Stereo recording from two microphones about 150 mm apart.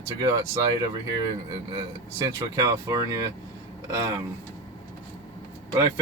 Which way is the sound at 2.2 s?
25° right (ahead or behind).